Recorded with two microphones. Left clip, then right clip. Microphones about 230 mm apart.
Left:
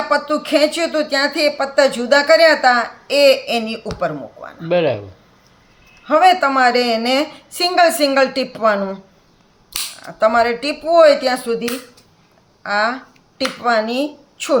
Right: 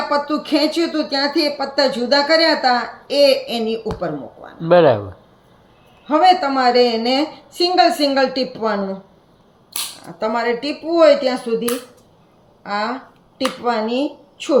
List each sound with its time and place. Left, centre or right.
0.1 s speech: left
4.6 s speech: centre
6.1 s speech: left
10.2 s speech: left
12.6 s a woman's voice: left